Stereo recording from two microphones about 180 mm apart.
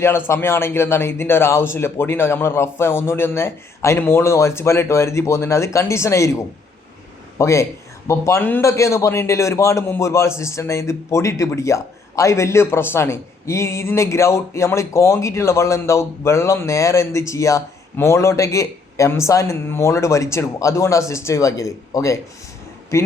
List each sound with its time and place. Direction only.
0.0 s a man's voice: 15° left (ahead or behind)